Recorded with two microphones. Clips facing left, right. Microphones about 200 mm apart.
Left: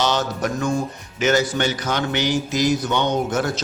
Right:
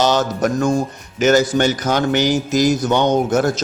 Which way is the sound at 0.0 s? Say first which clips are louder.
Right 5 dB; 45° right (ahead or behind).